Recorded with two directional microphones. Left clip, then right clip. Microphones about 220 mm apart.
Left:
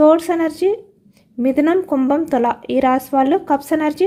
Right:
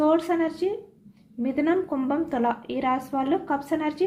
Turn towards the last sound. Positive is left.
turn(degrees=55)  # may be behind; listen again after turning